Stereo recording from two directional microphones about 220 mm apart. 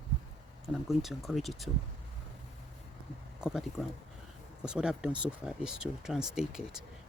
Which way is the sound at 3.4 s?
Centre (ahead or behind).